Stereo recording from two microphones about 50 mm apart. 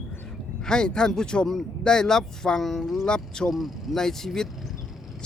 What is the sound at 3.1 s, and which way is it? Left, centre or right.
Speech, centre.